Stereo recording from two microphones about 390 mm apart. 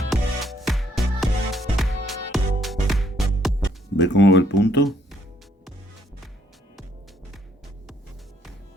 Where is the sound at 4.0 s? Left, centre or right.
Left.